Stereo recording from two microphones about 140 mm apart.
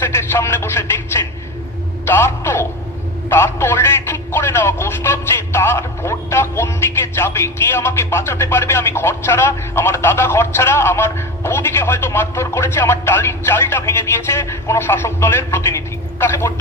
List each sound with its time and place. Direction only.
0.1 s speech: 20° left (ahead or behind)